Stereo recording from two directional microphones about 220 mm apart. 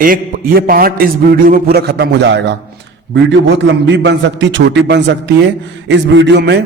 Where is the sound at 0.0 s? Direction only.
40° right (ahead or behind).